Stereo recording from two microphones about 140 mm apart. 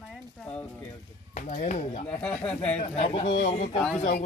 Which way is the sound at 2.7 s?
50° left (ahead or behind).